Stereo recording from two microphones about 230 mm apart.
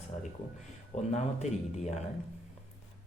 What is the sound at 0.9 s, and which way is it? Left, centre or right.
Speech, left.